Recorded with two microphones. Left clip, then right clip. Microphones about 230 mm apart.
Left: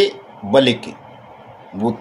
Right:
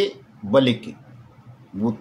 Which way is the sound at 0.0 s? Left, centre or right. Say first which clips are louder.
Left 7 dB; centre.